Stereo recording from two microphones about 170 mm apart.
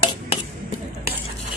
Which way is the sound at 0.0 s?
25° left (ahead or behind).